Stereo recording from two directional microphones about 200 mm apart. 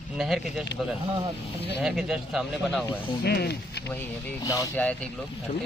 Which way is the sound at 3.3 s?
55° left (ahead or behind).